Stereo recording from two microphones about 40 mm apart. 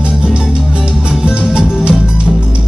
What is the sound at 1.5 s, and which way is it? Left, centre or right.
Music, right.